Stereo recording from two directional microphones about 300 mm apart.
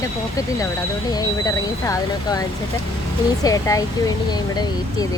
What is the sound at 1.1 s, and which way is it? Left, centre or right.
Speech, centre.